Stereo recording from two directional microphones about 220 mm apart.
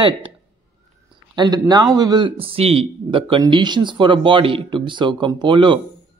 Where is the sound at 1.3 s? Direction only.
20° right (ahead or behind).